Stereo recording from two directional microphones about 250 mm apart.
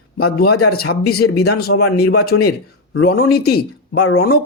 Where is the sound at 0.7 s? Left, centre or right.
Left.